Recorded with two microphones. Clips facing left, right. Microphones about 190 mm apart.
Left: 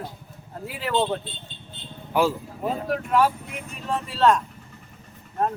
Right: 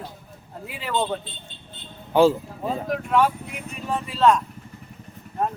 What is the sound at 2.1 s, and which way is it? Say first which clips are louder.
Speech: right 5 dB; 30° right (ahead or behind).